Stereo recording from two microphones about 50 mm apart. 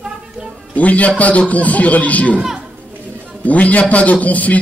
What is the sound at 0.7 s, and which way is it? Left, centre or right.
A man's voice, left.